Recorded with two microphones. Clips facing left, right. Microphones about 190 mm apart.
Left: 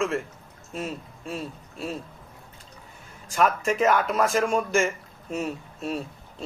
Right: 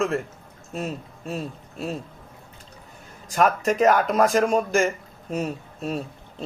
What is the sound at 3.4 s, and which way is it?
Speech, 40° right (ahead or behind).